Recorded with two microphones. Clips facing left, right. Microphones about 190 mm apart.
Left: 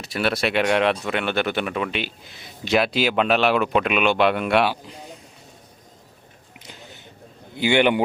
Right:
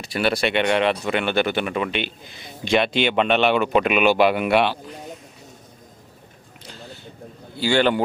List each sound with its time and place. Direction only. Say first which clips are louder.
0.0 s speech: right 2 dB; centre (ahead or behind)
6.7 s a sound: right 4 dB; 20° left (ahead or behind)
7.5 s a man's voice: left 1 dB; 20° left (ahead or behind)